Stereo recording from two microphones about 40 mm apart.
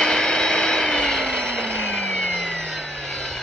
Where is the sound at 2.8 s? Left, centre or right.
Centre.